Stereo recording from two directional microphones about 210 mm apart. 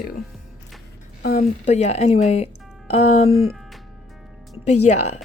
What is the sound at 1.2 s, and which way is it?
A woman's voice, 40° left (ahead or behind).